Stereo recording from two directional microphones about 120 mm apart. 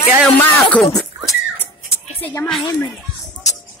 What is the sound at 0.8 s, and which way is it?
Speech, 5° left (ahead or behind).